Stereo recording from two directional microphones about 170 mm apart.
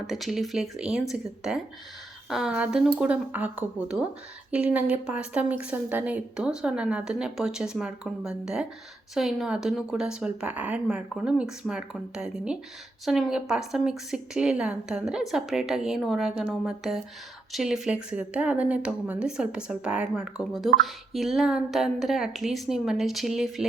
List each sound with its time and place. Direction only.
0.1 s speech: centre (ahead or behind)